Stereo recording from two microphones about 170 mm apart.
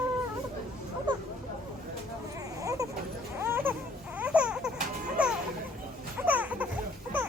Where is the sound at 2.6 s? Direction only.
20° right (ahead or behind).